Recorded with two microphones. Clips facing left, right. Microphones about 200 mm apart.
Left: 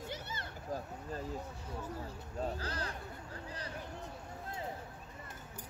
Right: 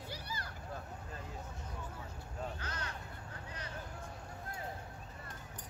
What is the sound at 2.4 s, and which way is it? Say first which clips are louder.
Bleat: left 5 dB; 35° left (ahead or behind).